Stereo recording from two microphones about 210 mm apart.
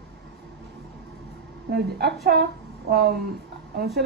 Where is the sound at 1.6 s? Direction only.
50° right (ahead or behind).